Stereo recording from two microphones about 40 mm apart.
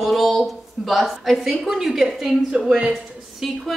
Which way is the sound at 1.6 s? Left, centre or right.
Centre.